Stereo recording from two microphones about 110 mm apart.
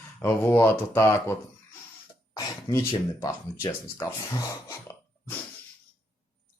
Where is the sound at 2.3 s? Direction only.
35° left (ahead or behind).